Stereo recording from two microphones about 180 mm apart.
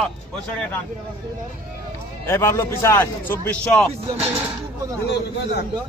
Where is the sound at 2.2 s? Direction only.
15° left (ahead or behind).